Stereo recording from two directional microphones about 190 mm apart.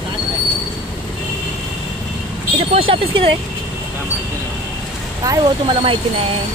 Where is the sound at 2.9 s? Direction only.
30° right (ahead or behind).